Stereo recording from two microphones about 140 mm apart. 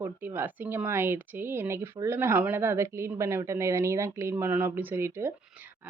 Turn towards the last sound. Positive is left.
turn(degrees=-15)  # may be behind; listen again after turning